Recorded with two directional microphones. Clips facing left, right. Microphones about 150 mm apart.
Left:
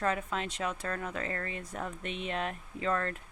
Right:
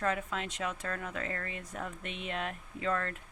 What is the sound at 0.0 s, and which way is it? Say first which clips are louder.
Speech: left 1 dB; 35° left (ahead or behind).